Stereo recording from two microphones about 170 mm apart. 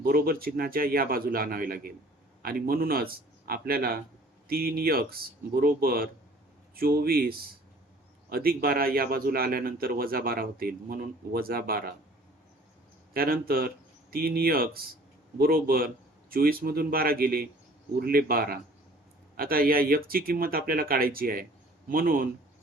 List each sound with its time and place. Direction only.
0.0 s a man's voice: 60° right (ahead or behind)
13.1 s a man's voice: 60° right (ahead or behind)